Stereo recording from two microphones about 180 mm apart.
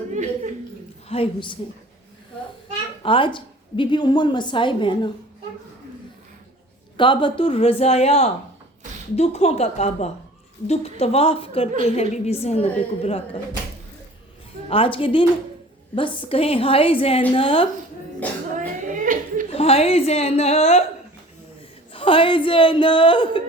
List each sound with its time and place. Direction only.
0.1 s a sound: 40° right (ahead or behind)
1.0 s a woman's voice: 30° left (ahead or behind)
3.0 s a woman's voice: 30° left (ahead or behind)
6.9 s a woman's voice: 25° left (ahead or behind)
14.7 s a woman's voice: 30° left (ahead or behind)
18.2 s music: 10° left (ahead or behind)
19.1 s laughter: 45° right (ahead or behind)
19.5 s a woman's voice: 35° left (ahead or behind)
21.9 s a woman's voice: 30° left (ahead or behind)